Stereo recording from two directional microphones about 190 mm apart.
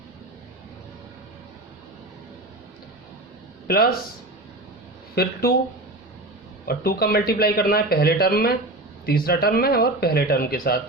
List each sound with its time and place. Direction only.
3.7 s speech: 55° left (ahead or behind)
5.1 s speech: 55° left (ahead or behind)
6.7 s speech: 55° left (ahead or behind)